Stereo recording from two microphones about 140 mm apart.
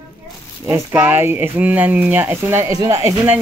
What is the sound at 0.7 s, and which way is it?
Speech, 15° right (ahead or behind).